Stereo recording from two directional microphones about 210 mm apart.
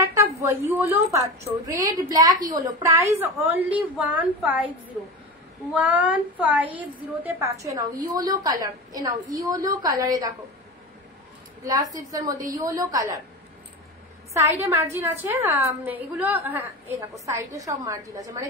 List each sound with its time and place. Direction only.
0.1 s a woman's voice: 15° right (ahead or behind)
2.5 s a woman's voice: 15° right (ahead or behind)
11.6 s a woman's voice: 15° right (ahead or behind)
14.3 s a woman's voice: 15° right (ahead or behind)